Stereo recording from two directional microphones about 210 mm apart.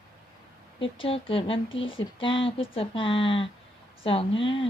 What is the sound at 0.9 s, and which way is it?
Speech, 25° left (ahead or behind).